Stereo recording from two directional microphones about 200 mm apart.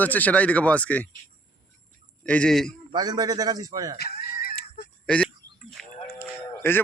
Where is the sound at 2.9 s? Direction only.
20° right (ahead or behind).